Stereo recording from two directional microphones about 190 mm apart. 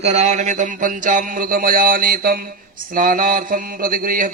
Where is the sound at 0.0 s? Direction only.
35° right (ahead or behind).